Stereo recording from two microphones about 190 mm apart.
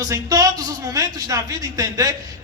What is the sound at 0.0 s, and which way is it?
Speech, 20° right (ahead or behind).